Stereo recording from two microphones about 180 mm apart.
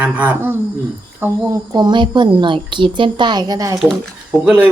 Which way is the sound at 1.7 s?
25° right (ahead or behind).